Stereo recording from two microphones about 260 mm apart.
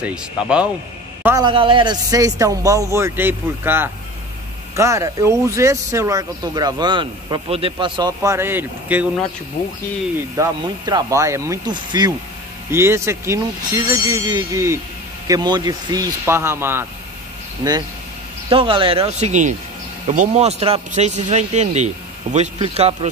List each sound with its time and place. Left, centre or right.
0.0 s speech: centre
1.2 s speech: centre
10.1 s speech: centre